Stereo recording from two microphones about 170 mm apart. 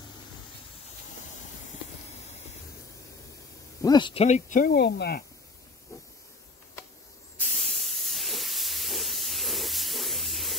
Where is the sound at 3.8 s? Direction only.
25° left (ahead or behind).